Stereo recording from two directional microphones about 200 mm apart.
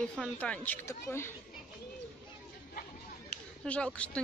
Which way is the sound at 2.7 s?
45° left (ahead or behind).